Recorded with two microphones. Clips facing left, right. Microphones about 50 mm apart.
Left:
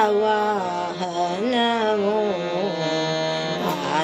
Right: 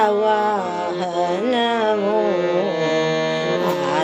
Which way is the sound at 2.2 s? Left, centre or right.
Right.